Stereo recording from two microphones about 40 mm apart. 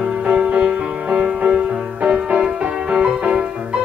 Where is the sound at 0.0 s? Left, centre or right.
Right.